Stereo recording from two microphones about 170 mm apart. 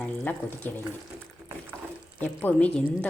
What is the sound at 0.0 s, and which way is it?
Speech, 10° left (ahead or behind).